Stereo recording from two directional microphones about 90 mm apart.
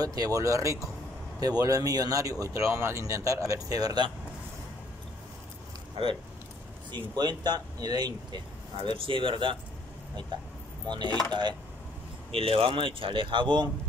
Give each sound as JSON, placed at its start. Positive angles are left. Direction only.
{"t": 0.0, "sound": "speech", "side_deg": -45}
{"t": 6.9, "sound": "speech", "side_deg": -55}
{"t": 8.7, "sound": "speech", "side_deg": -75}
{"t": 11.1, "sound": "speech", "side_deg": 15}
{"t": 12.3, "sound": "speech", "side_deg": -90}